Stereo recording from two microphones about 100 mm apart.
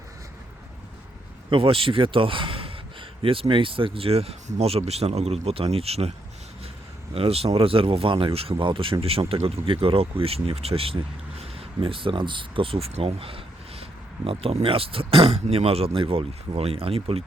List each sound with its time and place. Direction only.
1.5 s a man's voice: 65° right (ahead or behind)
14.3 s speech: 80° right